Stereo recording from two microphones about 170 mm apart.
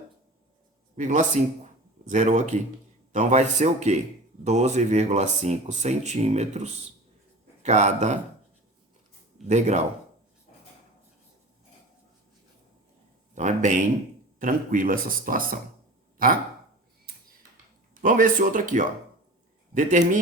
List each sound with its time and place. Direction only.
0.9 s a man's voice: 45° right (ahead or behind)
9.5 s a man's voice: 45° right (ahead or behind)
13.3 s a man's voice: 45° right (ahead or behind)
16.1 s a sound: 55° right (ahead or behind)
17.9 s a man's voice: 55° right (ahead or behind)